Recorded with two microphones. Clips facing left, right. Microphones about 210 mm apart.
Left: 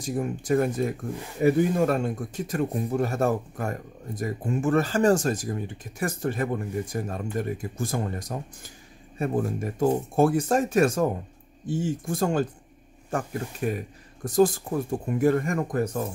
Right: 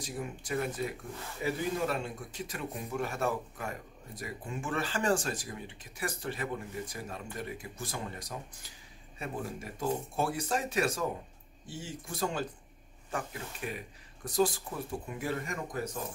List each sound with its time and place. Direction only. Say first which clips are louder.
0.0 s speech: left 10 dB; 50° left (ahead or behind)